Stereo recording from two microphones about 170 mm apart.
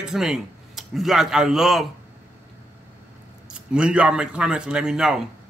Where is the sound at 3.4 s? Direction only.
5° right (ahead or behind).